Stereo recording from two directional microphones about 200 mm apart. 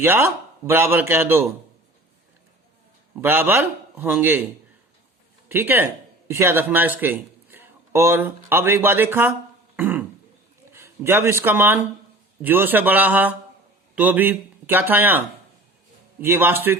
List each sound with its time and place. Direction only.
0.0 s speech: 10° right (ahead or behind)
3.2 s speech: 10° right (ahead or behind)
5.5 s speech: 10° right (ahead or behind)
9.7 s throat clearing: 10° right (ahead or behind)
10.7 s speech: 10° right (ahead or behind)
16.2 s speech: 10° right (ahead or behind)